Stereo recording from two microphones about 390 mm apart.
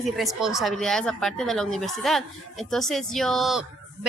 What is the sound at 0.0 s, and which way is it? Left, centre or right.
Speech, centre.